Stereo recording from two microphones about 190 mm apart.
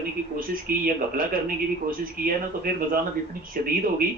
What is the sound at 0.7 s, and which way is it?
Speech, 50° right (ahead or behind).